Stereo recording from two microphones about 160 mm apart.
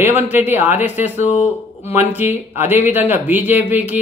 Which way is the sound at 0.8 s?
45° left (ahead or behind).